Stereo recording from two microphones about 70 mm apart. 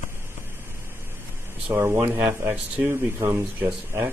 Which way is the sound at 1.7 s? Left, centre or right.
Right.